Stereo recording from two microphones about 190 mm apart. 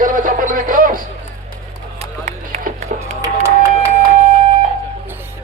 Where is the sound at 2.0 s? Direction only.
40° right (ahead or behind).